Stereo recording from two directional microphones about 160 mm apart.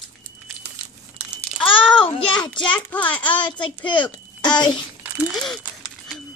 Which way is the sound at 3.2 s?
30° left (ahead or behind).